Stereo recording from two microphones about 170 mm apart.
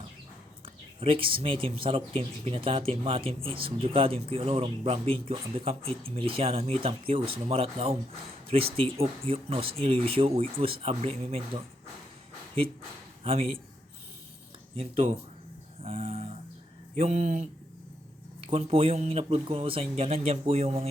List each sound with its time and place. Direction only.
0.6 s speech: 30° right (ahead or behind)
13.2 s speech: 35° right (ahead or behind)
14.8 s speech: 35° right (ahead or behind)